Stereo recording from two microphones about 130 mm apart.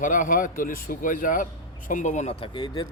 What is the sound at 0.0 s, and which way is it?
Speech, 90° left.